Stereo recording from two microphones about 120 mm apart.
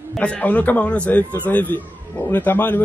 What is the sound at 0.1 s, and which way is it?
A man's voice, 10° left (ahead or behind).